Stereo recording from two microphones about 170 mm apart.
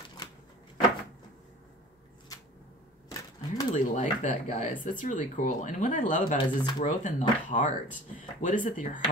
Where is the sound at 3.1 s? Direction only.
25° left (ahead or behind).